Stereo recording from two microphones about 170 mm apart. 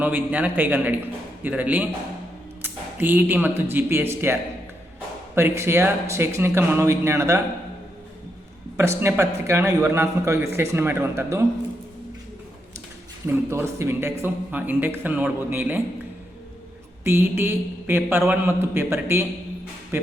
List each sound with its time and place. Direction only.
0.0 s a man's voice: 10° right (ahead or behind)
8.7 s a man's voice: 15° right (ahead or behind)
13.2 s a man's voice: 15° right (ahead or behind)
17.0 s a man's voice: 15° right (ahead or behind)